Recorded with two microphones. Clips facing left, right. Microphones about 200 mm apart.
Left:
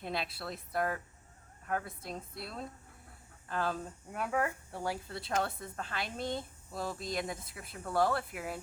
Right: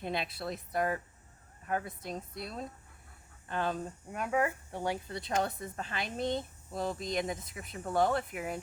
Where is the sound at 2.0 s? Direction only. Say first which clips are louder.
Right 3 dB; centre (ahead or behind).